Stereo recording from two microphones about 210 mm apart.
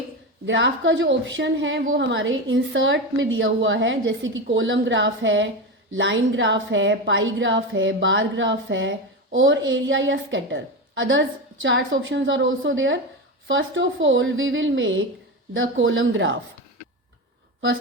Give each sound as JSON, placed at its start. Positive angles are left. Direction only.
{"t": 0.4, "sound": "a woman's voice", "side_deg": -60}